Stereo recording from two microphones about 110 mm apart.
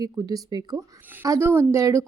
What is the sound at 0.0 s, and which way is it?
Speech, 35° right (ahead or behind).